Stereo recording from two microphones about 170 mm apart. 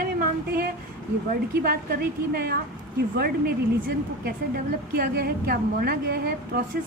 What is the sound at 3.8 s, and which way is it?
A woman's voice, 60° right (ahead or behind).